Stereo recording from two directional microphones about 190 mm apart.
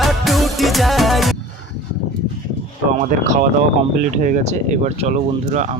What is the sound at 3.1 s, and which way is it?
Speech, 40° right (ahead or behind).